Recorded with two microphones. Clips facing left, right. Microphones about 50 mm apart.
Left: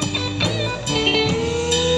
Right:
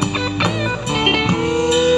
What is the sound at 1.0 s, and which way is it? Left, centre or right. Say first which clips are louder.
Music: right 2 dB; right.